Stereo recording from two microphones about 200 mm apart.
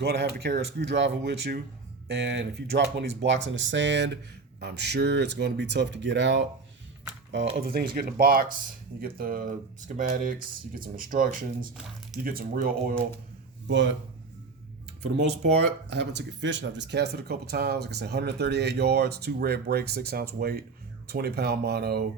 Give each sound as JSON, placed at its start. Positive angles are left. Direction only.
{"t": 0.0, "sound": "speech", "side_deg": -55}
{"t": 7.5, "sound": "speech", "side_deg": -50}
{"t": 13.7, "sound": "a man's voice", "side_deg": -65}
{"t": 16.1, "sound": "speech", "side_deg": -65}